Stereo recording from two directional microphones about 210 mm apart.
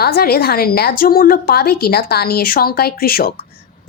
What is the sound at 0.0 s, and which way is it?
A woman's voice, 50° left (ahead or behind).